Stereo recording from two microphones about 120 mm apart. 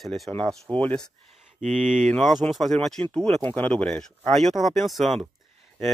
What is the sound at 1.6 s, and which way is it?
Speech, 85° right.